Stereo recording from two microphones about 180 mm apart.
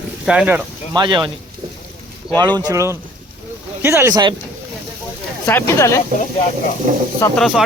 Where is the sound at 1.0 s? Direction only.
25° right (ahead or behind).